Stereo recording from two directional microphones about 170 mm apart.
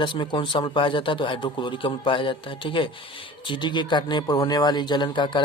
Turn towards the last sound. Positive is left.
turn(degrees=25)  # may be behind; listen again after turning